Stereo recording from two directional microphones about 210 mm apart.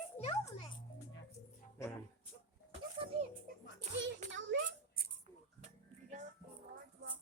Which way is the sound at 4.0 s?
60° right (ahead or behind).